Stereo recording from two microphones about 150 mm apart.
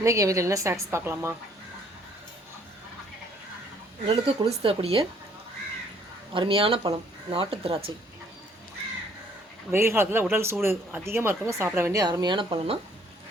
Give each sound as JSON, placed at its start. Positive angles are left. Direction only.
{"t": 0.0, "sound": "a woman's voice", "side_deg": -20}
{"t": 4.0, "sound": "speech", "side_deg": -40}
{"t": 6.3, "sound": "speech", "side_deg": -35}
{"t": 9.7, "sound": "speech", "side_deg": -15}